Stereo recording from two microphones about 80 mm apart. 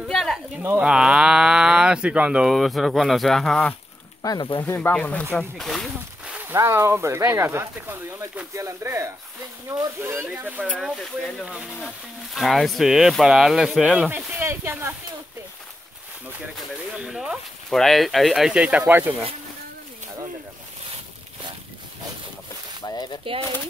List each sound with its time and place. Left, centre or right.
0.1 s a sound: centre
0.7 s speech: centre
2.4 s speech: centre
4.4 s speech: left
4.6 s speech: left
4.9 s speech: centre
5.6 s speech: centre
6.4 s speech: right
10.8 s speech: centre
14.1 s speech: right
16.9 s speech: centre
18.5 s speech: centre
18.9 s speech: right
22.8 s speech: left